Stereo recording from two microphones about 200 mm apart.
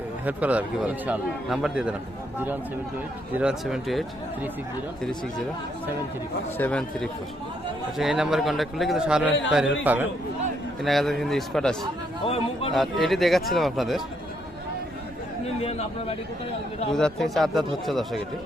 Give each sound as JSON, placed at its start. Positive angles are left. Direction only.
{"t": 0.3, "sound": "a man's voice", "side_deg": -5}
{"t": 3.3, "sound": "a man's voice", "side_deg": -5}
{"t": 6.6, "sound": "a man's voice", "side_deg": 5}
{"t": 12.2, "sound": "speech", "side_deg": 30}
{"t": 12.7, "sound": "a man's voice", "side_deg": 0}
{"t": 15.6, "sound": "speech", "side_deg": 30}
{"t": 16.9, "sound": "a man's voice", "side_deg": 0}